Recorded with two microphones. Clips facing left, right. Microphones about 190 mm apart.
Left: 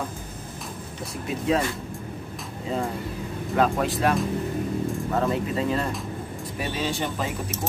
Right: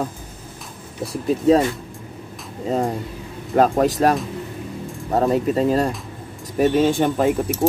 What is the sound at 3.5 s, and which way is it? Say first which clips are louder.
Speech: right 7 dB; 40° right (ahead or behind).